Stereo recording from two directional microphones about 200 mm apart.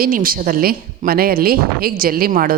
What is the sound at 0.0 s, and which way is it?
A woman's voice, 45° right (ahead or behind).